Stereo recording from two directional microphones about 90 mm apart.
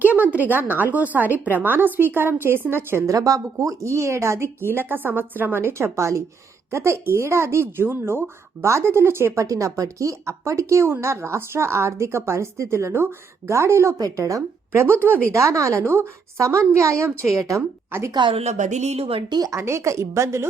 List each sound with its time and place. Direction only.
0.0 s a woman's voice: 20° right (ahead or behind)
3.2 s a woman's voice: 40° right (ahead or behind)
15.0 s a woman's voice: 20° right (ahead or behind)
15.3 s a woman's voice: 35° right (ahead or behind)
18.1 s a woman's voice: 65° right (ahead or behind)
18.9 s speech: 90° right
19.3 s speech: 45° right (ahead or behind)
19.5 s a woman's voice: 30° right (ahead or behind)